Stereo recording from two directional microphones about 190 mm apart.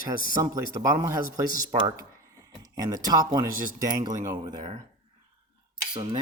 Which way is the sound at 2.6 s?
20° right (ahead or behind).